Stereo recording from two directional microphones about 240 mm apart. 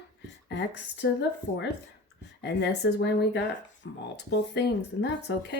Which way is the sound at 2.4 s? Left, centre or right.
Left.